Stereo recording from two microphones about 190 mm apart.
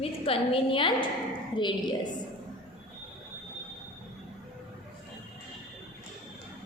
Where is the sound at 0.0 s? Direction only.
30° left (ahead or behind).